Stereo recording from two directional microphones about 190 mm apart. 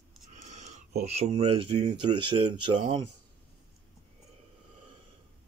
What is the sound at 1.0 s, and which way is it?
Speech, 35° right (ahead or behind).